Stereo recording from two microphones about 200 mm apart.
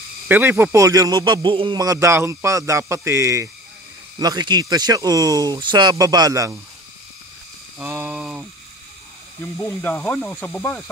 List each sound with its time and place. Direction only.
0.3 s speech: 10° right (ahead or behind)
7.8 s a sound: 10° right (ahead or behind)
9.6 s speech: 10° left (ahead or behind)